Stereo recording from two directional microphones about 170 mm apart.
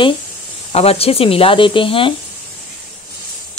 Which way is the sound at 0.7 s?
35° left (ahead or behind).